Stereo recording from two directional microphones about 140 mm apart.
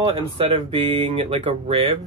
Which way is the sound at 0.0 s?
40° right (ahead or behind).